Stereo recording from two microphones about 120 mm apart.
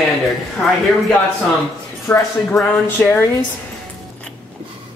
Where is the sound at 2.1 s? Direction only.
10° left (ahead or behind).